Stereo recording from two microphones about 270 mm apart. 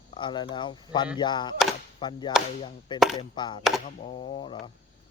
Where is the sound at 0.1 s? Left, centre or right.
Centre.